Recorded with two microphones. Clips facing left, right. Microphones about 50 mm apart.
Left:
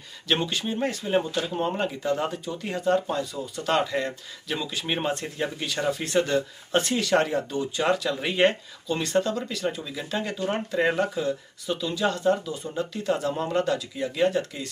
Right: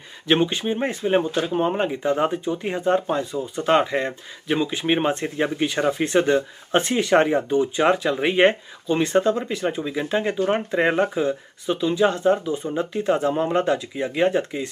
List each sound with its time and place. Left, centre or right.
0.3 s speech: right